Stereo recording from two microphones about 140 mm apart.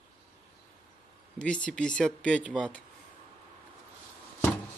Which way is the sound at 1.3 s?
10° left (ahead or behind).